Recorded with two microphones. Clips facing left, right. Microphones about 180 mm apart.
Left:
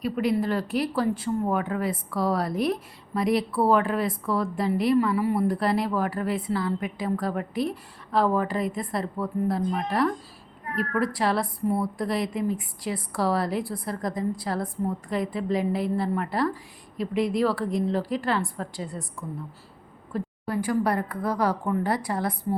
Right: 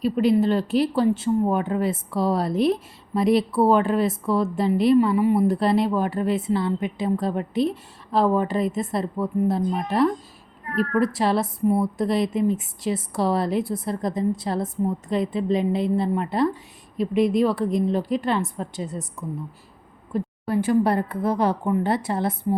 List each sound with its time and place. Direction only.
0.0 s speech: 25° right (ahead or behind)
20.1 s speech: 25° right (ahead or behind)